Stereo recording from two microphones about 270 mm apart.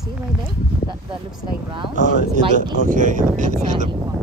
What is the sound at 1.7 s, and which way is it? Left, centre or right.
Speech, right.